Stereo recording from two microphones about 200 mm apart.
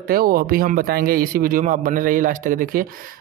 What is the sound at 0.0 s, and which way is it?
A man's voice, 45° right (ahead or behind).